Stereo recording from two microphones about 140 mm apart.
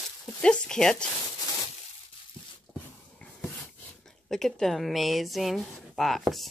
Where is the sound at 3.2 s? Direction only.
10° left (ahead or behind).